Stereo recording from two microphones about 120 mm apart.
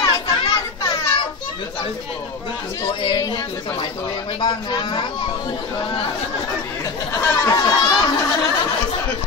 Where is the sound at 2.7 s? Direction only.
35° left (ahead or behind).